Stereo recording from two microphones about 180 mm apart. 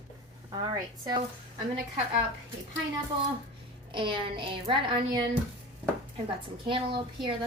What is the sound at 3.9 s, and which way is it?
A woman's voice, 30° right (ahead or behind).